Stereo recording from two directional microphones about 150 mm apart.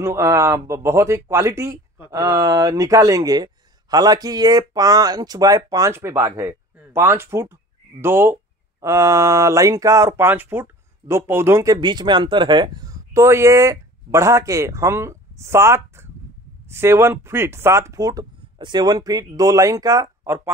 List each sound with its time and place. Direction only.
0.0 s speech: 20° right (ahead or behind)